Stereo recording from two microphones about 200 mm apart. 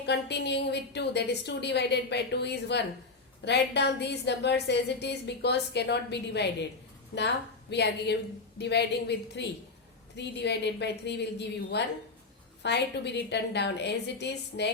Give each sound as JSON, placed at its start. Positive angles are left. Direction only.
{"t": 0.0, "sound": "a woman's voice", "side_deg": 55}
{"t": 7.7, "sound": "a woman's voice", "side_deg": 55}